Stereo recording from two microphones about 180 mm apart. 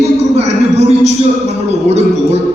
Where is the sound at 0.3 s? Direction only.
35° right (ahead or behind).